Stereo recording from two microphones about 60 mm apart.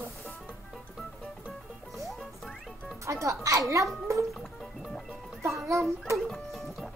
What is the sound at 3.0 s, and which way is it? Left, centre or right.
Speech, right.